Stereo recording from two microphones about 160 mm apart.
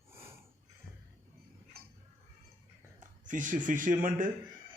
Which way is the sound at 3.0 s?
55° right (ahead or behind).